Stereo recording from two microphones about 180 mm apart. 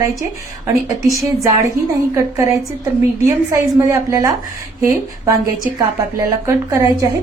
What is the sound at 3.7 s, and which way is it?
Speech, 15° right (ahead or behind).